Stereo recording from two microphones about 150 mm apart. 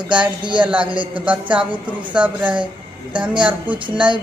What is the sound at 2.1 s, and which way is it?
Speech, 10° right (ahead or behind).